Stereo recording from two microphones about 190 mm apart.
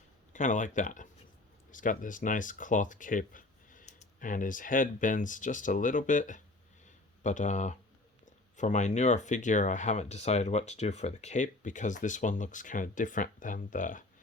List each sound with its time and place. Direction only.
0.3 s speech: 40° left (ahead or behind)